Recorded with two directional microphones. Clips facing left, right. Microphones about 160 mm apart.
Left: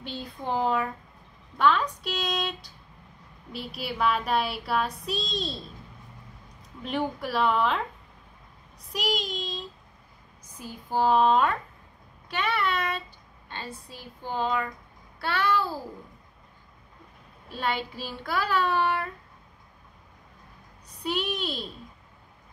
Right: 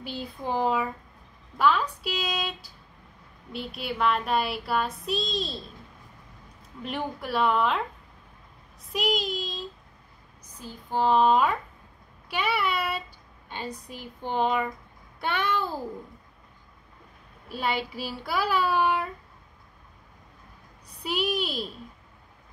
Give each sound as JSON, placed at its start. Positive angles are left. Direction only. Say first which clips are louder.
{"t": 0.0, "sound": "child singing", "louder": "right 1 dB", "side_deg": -5}
{"t": 6.8, "sound": "child singing", "louder": "left 3 dB", "side_deg": 0}
{"t": 8.9, "sound": "child singing", "louder": "right 2 dB", "side_deg": 0}
{"t": 10.6, "sound": "child singing", "louder": "left 1 dB", "side_deg": 10}
{"t": 12.3, "sound": "speech", "louder": "even", "side_deg": -10}
{"t": 15.1, "sound": "a sound", "louder": "left 1 dB", "side_deg": -20}
{"t": 17.5, "sound": "speech", "louder": "right 1 dB", "side_deg": -10}
{"t": 21.0, "sound": "speech", "louder": "right 2 dB", "side_deg": -10}